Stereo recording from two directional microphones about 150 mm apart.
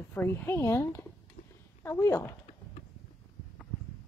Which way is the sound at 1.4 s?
65° left (ahead or behind).